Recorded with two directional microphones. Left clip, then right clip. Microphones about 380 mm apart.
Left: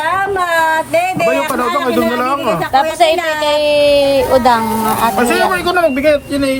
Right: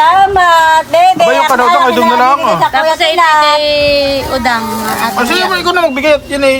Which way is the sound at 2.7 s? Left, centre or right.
Centre.